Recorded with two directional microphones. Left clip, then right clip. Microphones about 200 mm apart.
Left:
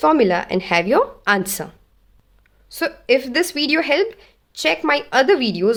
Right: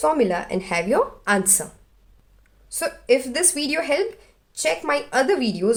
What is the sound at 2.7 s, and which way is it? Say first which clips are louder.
A woman's voice: left 2 dB; 30° left (ahead or behind).